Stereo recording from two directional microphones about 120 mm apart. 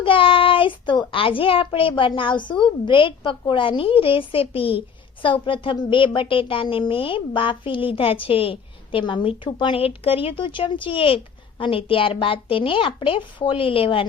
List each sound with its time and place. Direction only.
0.0 s a woman's voice: 45° left (ahead or behind)